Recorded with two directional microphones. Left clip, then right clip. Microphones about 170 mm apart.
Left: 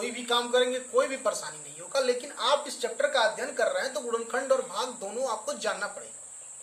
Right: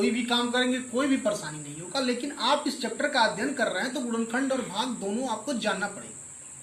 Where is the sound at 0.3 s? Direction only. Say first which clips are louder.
Left 1 dB; 20° left (ahead or behind).